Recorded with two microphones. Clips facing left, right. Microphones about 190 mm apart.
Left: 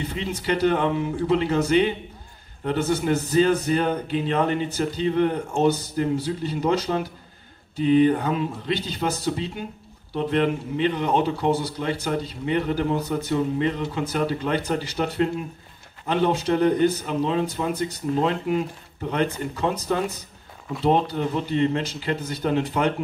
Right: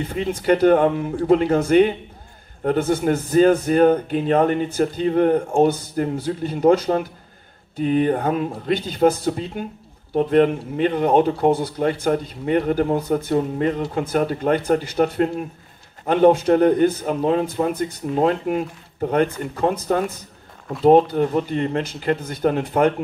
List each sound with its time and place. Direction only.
0.1 s speech: 50° right (ahead or behind)